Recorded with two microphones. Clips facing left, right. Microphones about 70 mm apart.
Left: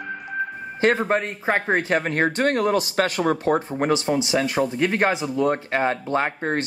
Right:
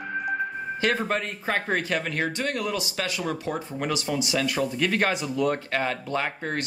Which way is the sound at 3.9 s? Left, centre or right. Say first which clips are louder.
Left 5 dB; left.